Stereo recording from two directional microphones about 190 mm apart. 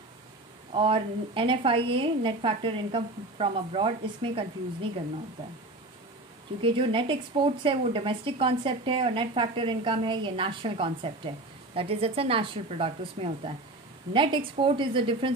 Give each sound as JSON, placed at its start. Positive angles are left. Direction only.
{"t": 0.7, "sound": "speech", "side_deg": -30}
{"t": 6.6, "sound": "speech", "side_deg": -25}